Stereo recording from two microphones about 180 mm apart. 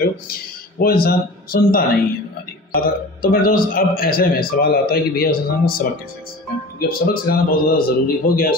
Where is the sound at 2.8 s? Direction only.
55° left (ahead or behind).